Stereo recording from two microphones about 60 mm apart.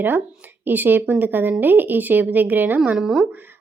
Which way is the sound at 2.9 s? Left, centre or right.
Centre.